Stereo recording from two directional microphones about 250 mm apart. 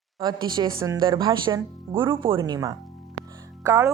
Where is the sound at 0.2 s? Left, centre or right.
Centre.